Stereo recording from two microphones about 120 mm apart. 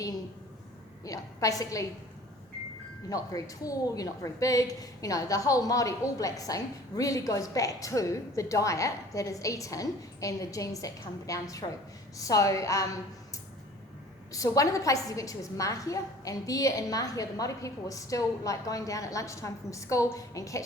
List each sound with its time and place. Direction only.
1.0 s a woman's voice: 30° left (ahead or behind)
3.1 s a woman's voice: 30° left (ahead or behind)